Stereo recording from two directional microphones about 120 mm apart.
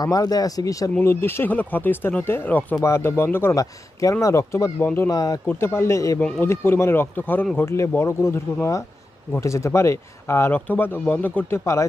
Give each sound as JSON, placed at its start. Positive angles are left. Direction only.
{"t": 0.0, "sound": "speech", "side_deg": 30}
{"t": 5.1, "sound": "speech", "side_deg": 30}
{"t": 5.5, "sound": "speech", "side_deg": 20}
{"t": 6.1, "sound": "speech", "side_deg": 5}
{"t": 6.4, "sound": "speech", "side_deg": 20}